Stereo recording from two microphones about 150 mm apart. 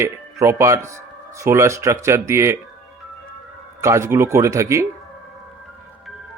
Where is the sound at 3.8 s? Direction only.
20° right (ahead or behind).